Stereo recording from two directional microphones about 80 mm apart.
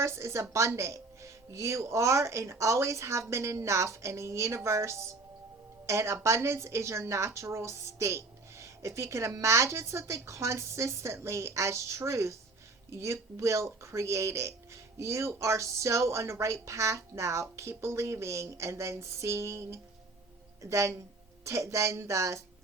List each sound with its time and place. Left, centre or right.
0.0 s a woman's voice: right